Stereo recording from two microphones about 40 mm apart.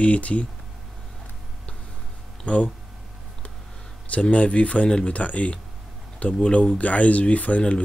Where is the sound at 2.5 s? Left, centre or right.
Left.